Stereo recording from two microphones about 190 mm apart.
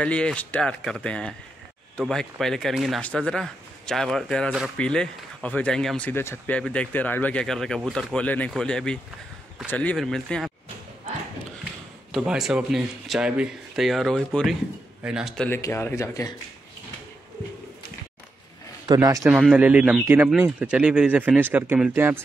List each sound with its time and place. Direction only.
0.0 s speech: 5° left (ahead or behind)
12.1 s speech: centre (ahead or behind); by 16.3 s 15° left (ahead or behind)
18.9 s speech: 15° right (ahead or behind)